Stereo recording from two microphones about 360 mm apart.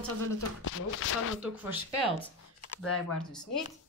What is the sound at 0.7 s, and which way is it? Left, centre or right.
Speech, left.